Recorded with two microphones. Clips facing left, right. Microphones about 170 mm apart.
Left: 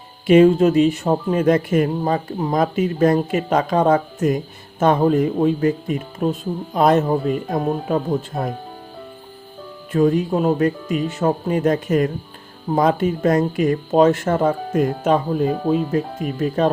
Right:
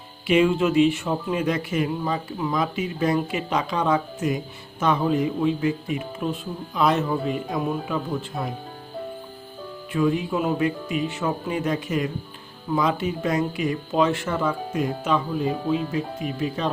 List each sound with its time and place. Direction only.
0.3 s speech: 45° left (ahead or behind)
9.9 s speech: 45° left (ahead or behind)